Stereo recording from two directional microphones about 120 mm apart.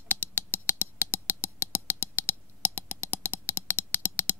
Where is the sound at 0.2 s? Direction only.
15° left (ahead or behind).